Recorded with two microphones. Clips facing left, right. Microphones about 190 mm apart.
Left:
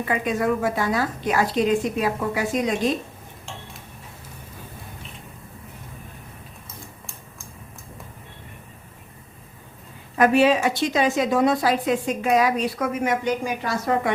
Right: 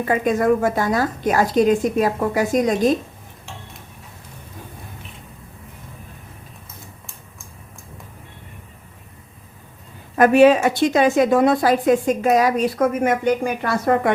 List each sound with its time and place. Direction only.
0.0 s a woman's voice: 45° right (ahead or behind)
10.2 s a woman's voice: 50° right (ahead or behind)